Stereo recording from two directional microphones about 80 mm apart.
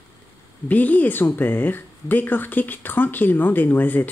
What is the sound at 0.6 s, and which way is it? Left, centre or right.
Speech, left.